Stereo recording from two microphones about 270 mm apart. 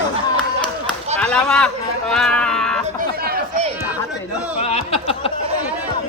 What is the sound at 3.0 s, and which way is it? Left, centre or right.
Chatter, right.